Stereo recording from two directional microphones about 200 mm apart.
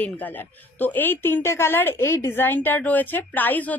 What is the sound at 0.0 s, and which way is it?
A woman's voice, 10° left (ahead or behind).